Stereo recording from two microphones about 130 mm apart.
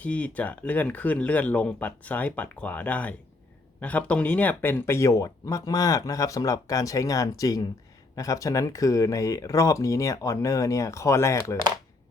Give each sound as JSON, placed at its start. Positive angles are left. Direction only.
{"t": 0.0, "sound": "speech", "side_deg": 10}